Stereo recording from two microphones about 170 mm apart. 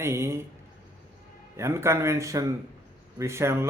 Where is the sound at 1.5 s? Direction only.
15° right (ahead or behind).